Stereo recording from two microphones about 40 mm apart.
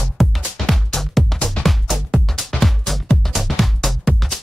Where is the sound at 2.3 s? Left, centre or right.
Centre.